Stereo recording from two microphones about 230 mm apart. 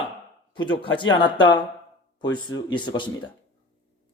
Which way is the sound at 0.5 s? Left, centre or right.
Left.